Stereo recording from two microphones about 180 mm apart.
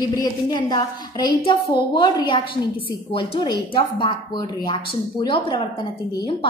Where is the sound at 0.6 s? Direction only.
25° left (ahead or behind).